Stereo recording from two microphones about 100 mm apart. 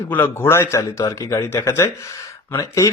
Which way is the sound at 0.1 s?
20° left (ahead or behind).